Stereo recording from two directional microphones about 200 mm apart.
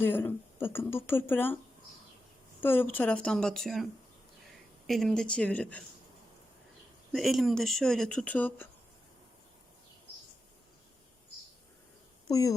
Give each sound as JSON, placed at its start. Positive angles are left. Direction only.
{"t": 0.0, "sound": "speech", "side_deg": 10}
{"t": 2.6, "sound": "speech", "side_deg": 10}
{"t": 4.9, "sound": "speech", "side_deg": 0}
{"t": 7.1, "sound": "speech", "side_deg": 0}
{"t": 12.3, "sound": "speech", "side_deg": 15}